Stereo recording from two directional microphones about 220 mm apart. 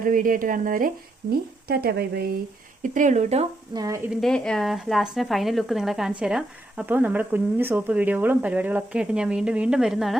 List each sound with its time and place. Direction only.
0.0 s speech: 40° right (ahead or behind)
2.8 s speech: 35° right (ahead or behind)
3.8 s a woman's voice: 15° right (ahead or behind)